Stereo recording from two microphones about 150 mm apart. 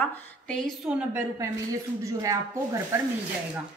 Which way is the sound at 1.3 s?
20° right (ahead or behind).